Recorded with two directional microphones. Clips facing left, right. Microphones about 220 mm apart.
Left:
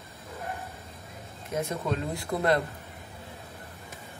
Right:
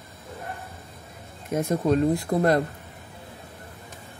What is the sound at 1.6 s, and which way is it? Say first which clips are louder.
Speech: right 8 dB; 45° right (ahead or behind).